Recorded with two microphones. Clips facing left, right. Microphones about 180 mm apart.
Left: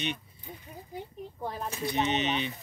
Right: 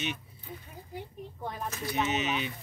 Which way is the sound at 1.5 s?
30° left (ahead or behind).